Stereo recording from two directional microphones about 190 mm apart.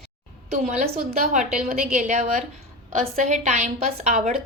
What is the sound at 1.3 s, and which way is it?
A woman's voice, 40° right (ahead or behind).